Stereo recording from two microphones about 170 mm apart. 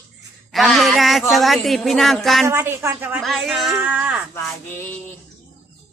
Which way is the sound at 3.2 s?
Centre (ahead or behind).